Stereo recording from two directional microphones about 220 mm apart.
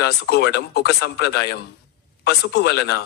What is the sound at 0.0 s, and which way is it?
A man's voice, 45° left (ahead or behind).